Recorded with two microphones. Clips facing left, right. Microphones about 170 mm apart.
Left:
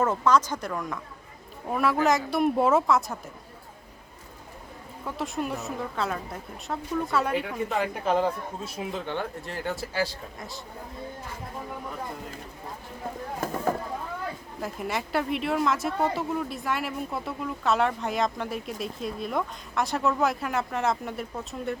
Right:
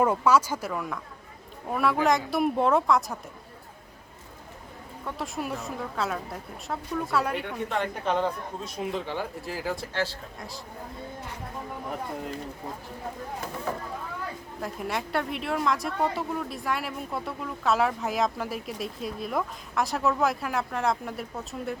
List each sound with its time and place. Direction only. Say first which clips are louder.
0.0 s speech: right 1 dB; 10° right (ahead or behind)
5.0 s speech: left 2 dB; centre (ahead or behind)
13.4 s a sound: left 10 dB; 45° left (ahead or behind)
14.6 s speech: left 1 dB; centre (ahead or behind)